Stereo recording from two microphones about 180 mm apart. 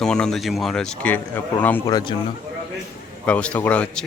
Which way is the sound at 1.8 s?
20° left (ahead or behind).